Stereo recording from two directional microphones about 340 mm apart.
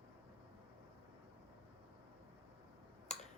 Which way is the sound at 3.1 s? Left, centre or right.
Centre.